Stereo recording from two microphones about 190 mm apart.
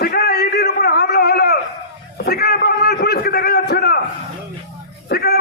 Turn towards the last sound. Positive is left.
turn(degrees=55)  # may be behind; listen again after turning